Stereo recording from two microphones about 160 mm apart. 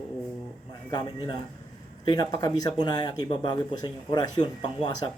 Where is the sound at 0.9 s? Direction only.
30° left (ahead or behind).